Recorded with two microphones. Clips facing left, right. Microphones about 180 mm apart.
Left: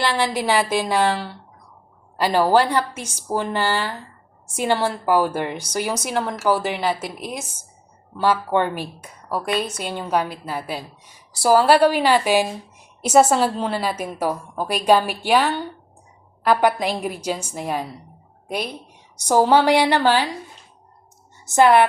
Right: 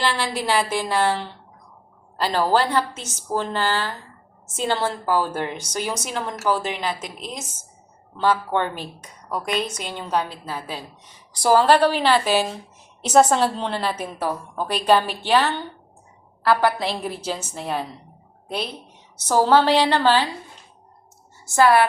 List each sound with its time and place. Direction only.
0.0 s a woman's voice: 15° left (ahead or behind)
21.4 s a woman's voice: 20° left (ahead or behind)